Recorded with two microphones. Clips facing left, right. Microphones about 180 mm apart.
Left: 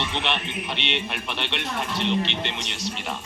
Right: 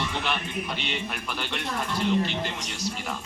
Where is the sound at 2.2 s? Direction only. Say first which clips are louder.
Even; 80° left.